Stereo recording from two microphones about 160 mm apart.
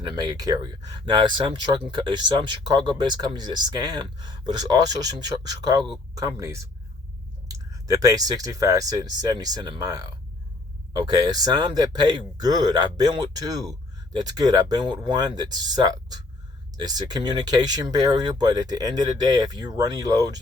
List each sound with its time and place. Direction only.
0.0 s speech: 25° right (ahead or behind)